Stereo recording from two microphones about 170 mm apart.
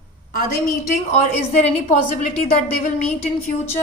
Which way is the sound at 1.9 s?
50° left (ahead or behind).